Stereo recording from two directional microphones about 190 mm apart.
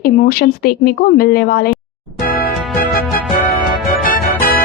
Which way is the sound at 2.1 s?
50° left (ahead or behind).